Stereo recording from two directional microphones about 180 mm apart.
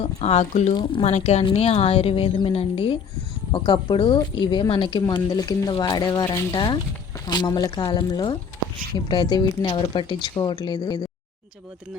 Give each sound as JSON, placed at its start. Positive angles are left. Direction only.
{"t": 0.0, "sound": "speech", "side_deg": 35}
{"t": 0.7, "sound": "a woman's voice", "side_deg": 25}